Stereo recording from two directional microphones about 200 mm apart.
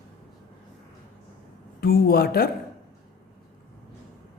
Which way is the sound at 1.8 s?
50° left (ahead or behind).